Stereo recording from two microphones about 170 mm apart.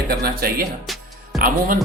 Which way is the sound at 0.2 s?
65° right (ahead or behind).